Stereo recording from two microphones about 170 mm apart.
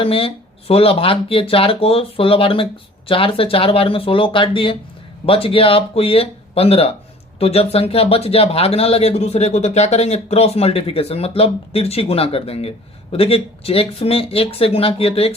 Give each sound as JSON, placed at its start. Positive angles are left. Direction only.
{"t": 0.0, "sound": "speech", "side_deg": 35}